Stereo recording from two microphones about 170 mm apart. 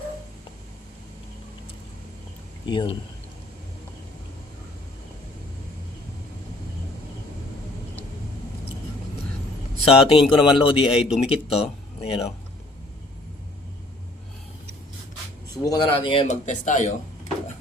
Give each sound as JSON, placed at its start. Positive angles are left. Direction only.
{"t": 2.6, "sound": "speech", "side_deg": 30}
{"t": 9.8, "sound": "speech", "side_deg": 35}
{"t": 15.6, "sound": "speech", "side_deg": 25}
{"t": 16.2, "sound": "speech", "side_deg": 45}